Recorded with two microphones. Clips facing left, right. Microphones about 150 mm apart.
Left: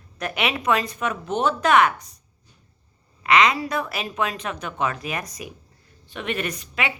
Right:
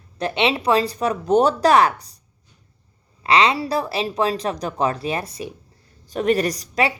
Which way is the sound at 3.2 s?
30° right (ahead or behind).